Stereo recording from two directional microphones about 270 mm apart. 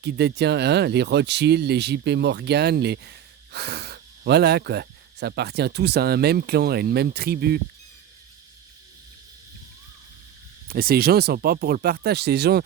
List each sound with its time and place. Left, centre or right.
0.0 s speech: right
10.7 s speech: right